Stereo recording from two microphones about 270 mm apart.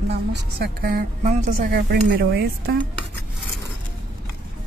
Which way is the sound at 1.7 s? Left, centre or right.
Right.